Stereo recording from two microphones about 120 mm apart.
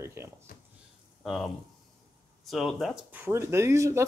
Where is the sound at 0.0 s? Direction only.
20° right (ahead or behind).